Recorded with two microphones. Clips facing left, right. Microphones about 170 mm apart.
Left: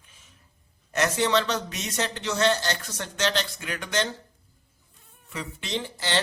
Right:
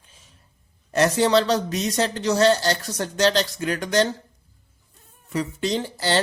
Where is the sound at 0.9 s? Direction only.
35° right (ahead or behind).